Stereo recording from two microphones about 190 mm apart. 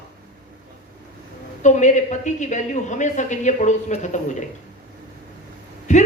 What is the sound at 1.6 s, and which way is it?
Speech, 40° left (ahead or behind).